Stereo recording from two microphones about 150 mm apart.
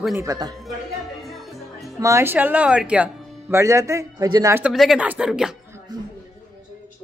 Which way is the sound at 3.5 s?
20° right (ahead or behind).